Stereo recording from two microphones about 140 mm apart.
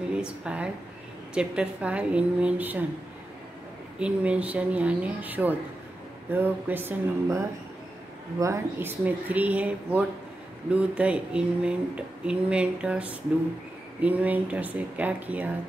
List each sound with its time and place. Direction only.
0.1 s a woman's voice: 5° right (ahead or behind)
4.0 s speech: 10° right (ahead or behind)